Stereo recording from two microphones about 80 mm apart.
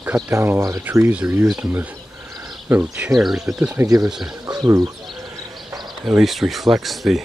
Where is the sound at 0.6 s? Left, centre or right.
Right.